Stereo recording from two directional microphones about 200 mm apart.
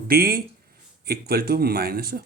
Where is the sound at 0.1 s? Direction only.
50° right (ahead or behind).